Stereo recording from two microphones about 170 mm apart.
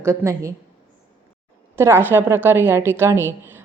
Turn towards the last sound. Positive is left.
turn(degrees=-15)  # may be behind; listen again after turning